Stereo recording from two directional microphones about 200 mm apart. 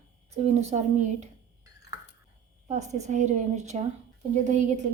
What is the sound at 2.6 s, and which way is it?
A woman's voice, 35° right (ahead or behind).